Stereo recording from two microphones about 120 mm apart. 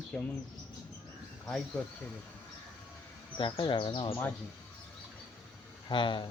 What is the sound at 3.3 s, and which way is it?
Speech, 45° left (ahead or behind).